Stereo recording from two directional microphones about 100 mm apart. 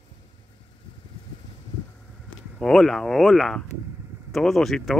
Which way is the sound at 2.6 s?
5° left (ahead or behind).